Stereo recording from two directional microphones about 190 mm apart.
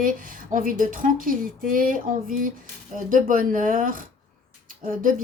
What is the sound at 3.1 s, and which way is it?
Speech, 45° right (ahead or behind).